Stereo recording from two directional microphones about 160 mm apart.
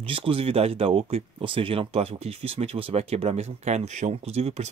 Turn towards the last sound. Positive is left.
turn(degrees=-40)  # may be behind; listen again after turning